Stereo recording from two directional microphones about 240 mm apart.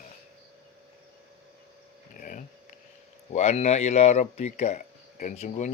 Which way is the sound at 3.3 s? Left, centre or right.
Left.